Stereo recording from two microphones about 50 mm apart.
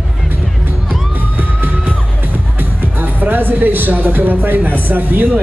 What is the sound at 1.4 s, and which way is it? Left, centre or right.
Music, right.